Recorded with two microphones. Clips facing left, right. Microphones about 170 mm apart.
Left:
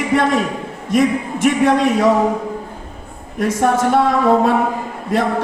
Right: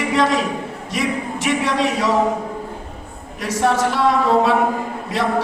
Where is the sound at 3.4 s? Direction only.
50° left (ahead or behind).